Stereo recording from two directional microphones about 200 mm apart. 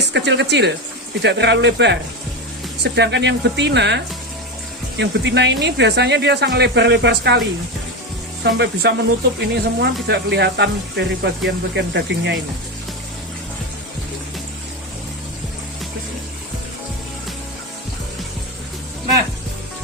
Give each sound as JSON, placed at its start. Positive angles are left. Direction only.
{"t": 0.1, "sound": "speech", "side_deg": -60}
{"t": 8.4, "sound": "speech", "side_deg": -55}